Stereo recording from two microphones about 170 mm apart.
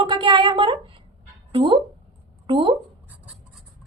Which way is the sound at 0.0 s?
30° right (ahead or behind).